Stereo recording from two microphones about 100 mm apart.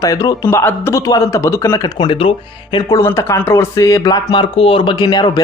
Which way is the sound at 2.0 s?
60° left (ahead or behind).